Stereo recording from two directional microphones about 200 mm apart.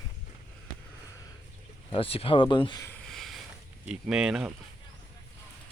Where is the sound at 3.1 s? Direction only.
Centre (ahead or behind).